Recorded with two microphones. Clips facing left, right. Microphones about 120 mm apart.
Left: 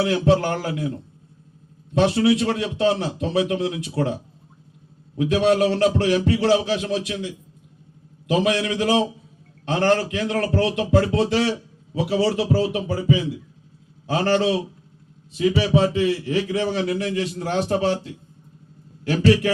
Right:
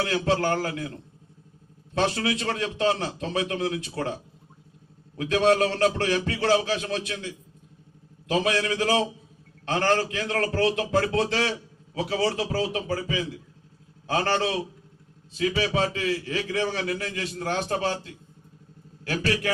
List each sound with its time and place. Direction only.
0.0 s a man's voice: 20° left (ahead or behind)
2.0 s a man's voice: 15° left (ahead or behind)
5.1 s a man's voice: 15° left (ahead or behind)
19.1 s a man's voice: 25° left (ahead or behind)